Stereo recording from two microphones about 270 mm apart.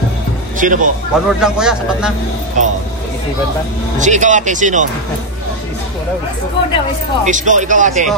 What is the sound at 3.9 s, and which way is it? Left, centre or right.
Speech, right.